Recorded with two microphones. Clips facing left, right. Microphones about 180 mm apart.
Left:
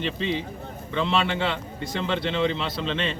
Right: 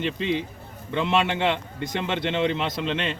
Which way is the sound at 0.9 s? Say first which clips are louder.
Right 1 dB; 15° right (ahead or behind).